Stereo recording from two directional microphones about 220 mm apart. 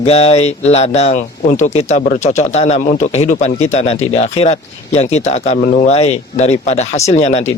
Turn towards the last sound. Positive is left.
turn(degrees=30)  # may be behind; listen again after turning